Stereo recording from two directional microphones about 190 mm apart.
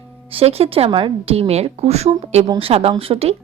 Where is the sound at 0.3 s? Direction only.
30° right (ahead or behind).